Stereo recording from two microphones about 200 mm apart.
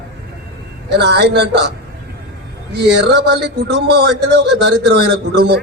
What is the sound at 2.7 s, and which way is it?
A man's voice, 55° right (ahead or behind).